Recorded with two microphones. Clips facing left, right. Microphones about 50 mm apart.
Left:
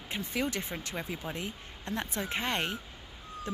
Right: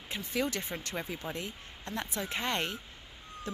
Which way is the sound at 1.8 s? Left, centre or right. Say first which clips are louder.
Left 2 dB; left.